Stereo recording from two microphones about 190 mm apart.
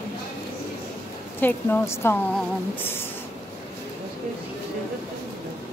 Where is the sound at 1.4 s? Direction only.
10° left (ahead or behind).